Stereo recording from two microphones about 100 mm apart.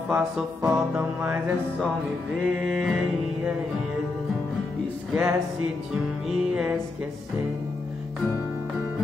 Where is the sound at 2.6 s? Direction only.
Centre (ahead or behind).